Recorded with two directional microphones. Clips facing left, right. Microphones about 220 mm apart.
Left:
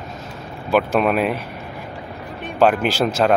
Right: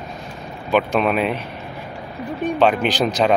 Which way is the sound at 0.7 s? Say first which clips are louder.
Left 1 dB; 5° left (ahead or behind).